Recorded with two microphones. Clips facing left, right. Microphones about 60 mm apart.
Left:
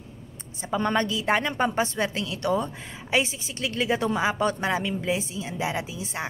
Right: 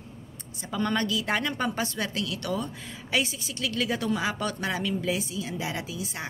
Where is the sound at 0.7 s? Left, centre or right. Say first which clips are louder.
Left 3 dB; left.